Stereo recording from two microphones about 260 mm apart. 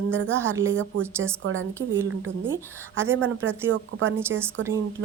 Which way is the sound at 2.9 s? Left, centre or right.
Centre.